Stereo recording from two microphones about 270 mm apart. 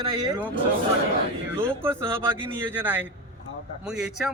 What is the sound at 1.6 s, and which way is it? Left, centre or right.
A man's voice, centre.